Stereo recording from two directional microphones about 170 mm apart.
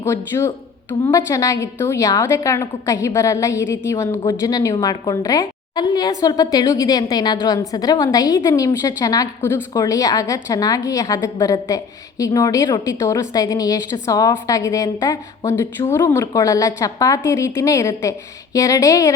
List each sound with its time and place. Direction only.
0.0 s a woman's voice: 15° left (ahead or behind)